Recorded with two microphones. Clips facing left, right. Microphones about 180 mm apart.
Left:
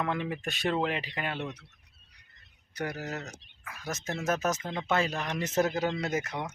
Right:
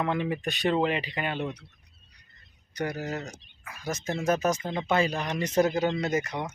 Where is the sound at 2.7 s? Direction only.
5° left (ahead or behind).